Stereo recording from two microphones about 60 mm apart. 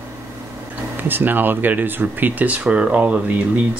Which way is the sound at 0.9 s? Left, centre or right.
Right.